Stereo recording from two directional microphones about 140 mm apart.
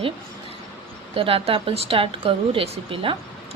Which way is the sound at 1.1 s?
40° right (ahead or behind).